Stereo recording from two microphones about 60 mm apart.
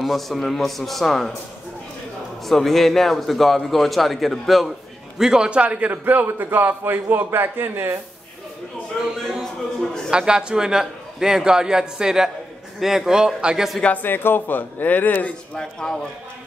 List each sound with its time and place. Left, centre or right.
0.0 s a man's voice: centre
2.4 s a man's voice: centre
5.2 s a man's voice: centre; by 8.0 s right
9.4 s a sound: centre
10.1 s a man's voice: centre
13.9 s speech: left
15.5 s a man's voice: centre